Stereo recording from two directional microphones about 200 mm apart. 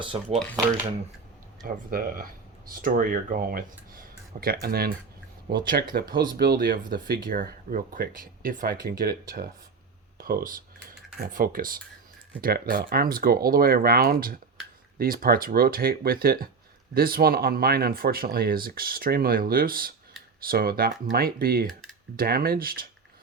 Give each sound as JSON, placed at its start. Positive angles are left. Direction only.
{"t": 0.0, "sound": "speech", "side_deg": -25}
{"t": 1.6, "sound": "speech", "side_deg": -45}
{"t": 10.2, "sound": "speech", "side_deg": -45}